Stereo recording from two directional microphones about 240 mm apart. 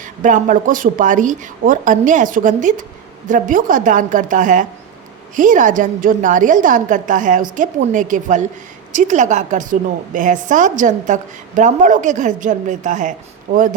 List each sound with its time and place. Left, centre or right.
0.0 s a woman's voice: right